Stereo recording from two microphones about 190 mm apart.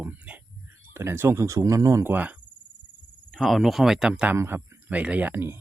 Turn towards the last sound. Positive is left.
turn(degrees=-10)  # may be behind; listen again after turning